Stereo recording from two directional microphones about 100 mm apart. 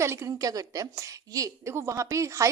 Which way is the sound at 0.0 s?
30° right (ahead or behind).